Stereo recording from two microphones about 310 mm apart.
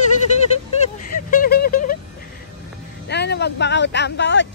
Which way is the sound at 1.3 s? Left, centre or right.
Left.